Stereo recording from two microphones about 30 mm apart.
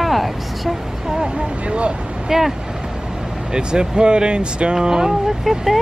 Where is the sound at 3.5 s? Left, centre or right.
Right.